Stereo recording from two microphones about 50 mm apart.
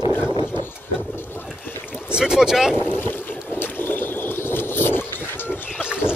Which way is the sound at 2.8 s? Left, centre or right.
Left.